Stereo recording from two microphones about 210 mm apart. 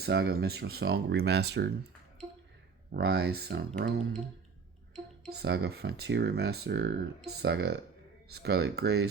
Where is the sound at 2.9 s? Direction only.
50° right (ahead or behind).